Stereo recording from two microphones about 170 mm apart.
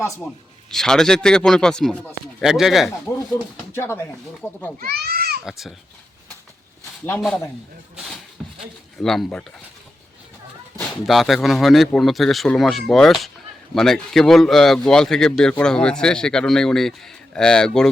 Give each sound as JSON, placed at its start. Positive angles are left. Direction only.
{"t": 0.7, "sound": "speech", "side_deg": 5}
{"t": 3.7, "sound": "speech", "side_deg": 15}
{"t": 4.8, "sound": "speech", "side_deg": -65}
{"t": 5.5, "sound": "speech", "side_deg": 0}
{"t": 7.2, "sound": "speech", "side_deg": 0}
{"t": 7.9, "sound": "a sound", "side_deg": 0}
{"t": 11.0, "sound": "speech", "side_deg": 0}